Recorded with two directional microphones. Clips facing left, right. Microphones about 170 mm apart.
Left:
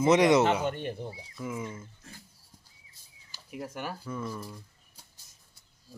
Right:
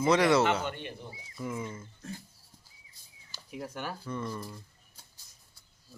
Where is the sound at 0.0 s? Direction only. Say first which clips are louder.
Left 3 dB; 20° left (ahead or behind).